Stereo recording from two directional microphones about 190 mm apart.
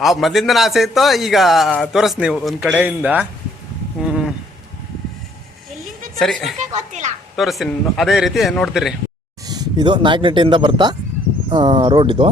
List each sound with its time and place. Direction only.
0.0 s a man's voice: centre (ahead or behind)
4.0 s a sound: centre (ahead or behind)
6.1 s a man's voice: centre (ahead or behind)
6.6 s speech: 40° right (ahead or behind)
7.3 s a man's voice: centre (ahead or behind)
9.5 s speech: 20° right (ahead or behind)